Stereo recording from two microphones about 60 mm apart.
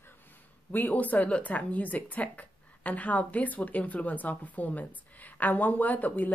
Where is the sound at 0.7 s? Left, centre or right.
Left.